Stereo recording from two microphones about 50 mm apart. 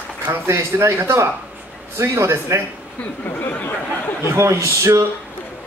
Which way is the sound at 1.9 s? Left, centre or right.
Right.